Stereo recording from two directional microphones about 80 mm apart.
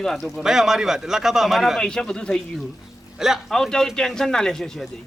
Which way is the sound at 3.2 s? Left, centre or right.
Centre.